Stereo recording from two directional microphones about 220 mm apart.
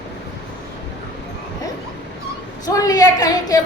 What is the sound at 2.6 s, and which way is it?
Speech, 15° left (ahead or behind).